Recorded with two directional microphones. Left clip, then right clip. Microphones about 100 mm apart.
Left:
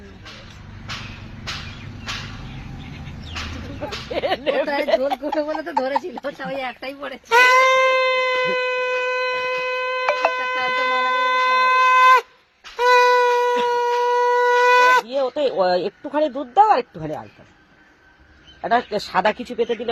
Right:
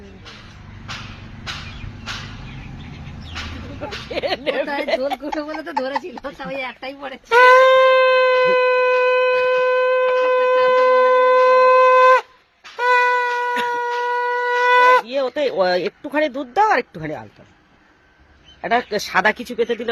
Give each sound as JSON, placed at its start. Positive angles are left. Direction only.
{"t": 4.1, "sound": "speech", "side_deg": -35}
{"t": 5.2, "sound": "a woman's voice", "side_deg": 15}
{"t": 6.5, "sound": "speech", "side_deg": 0}
{"t": 7.3, "sound": "shofar", "side_deg": -45}
{"t": 12.7, "sound": "a sound", "side_deg": -40}
{"t": 15.2, "sound": "speech", "side_deg": -50}
{"t": 18.6, "sound": "speech", "side_deg": -45}